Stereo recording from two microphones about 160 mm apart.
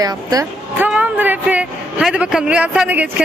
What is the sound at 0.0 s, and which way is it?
Speech, 25° right (ahead or behind).